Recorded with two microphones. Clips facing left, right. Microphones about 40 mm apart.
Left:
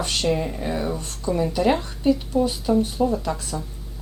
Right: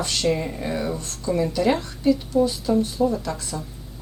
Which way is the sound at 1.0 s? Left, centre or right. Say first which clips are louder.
Even; left.